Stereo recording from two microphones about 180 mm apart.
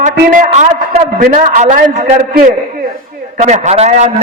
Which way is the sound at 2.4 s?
50° right (ahead or behind).